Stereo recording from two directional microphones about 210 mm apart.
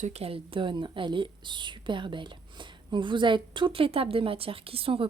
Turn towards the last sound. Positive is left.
turn(degrees=-25)  # may be behind; listen again after turning